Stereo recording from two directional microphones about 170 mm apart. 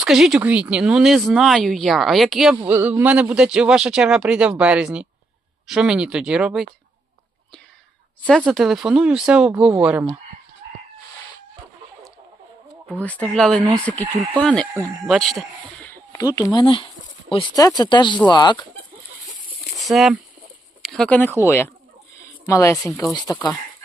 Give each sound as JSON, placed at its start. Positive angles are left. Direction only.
{"t": 0.0, "sound": "speech", "side_deg": 0}
{"t": 2.6, "sound": "speech", "side_deg": -10}
{"t": 8.3, "sound": "speech", "side_deg": 5}
{"t": 12.9, "sound": "speech", "side_deg": 10}
{"t": 15.9, "sound": "speech", "side_deg": 20}
{"t": 19.8, "sound": "speech", "side_deg": 0}